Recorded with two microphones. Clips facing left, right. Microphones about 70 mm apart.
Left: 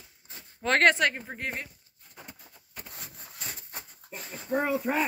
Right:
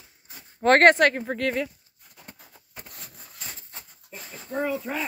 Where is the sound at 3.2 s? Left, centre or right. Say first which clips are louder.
Even; centre.